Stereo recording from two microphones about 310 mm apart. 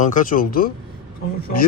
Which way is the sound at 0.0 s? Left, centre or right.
Left.